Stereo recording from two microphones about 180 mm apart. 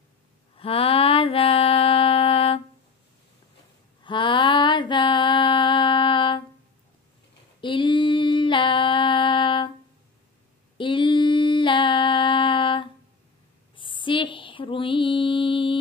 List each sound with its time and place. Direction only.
0.6 s music: 30° left (ahead or behind)
4.0 s female singing: 25° left (ahead or behind)
7.6 s female singing: 25° left (ahead or behind)
10.8 s a sound: 25° left (ahead or behind)
13.7 s mantra: 30° left (ahead or behind)